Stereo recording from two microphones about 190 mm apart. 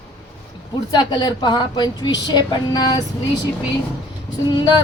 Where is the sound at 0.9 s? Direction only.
20° left (ahead or behind).